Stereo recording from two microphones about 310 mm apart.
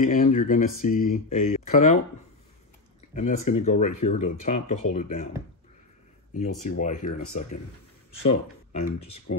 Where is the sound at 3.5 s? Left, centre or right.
Left.